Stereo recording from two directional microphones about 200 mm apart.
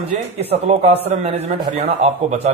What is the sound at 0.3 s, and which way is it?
A man's voice, 30° right (ahead or behind).